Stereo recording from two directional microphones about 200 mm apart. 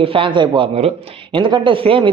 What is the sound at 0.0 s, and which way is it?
Speech, 25° right (ahead or behind).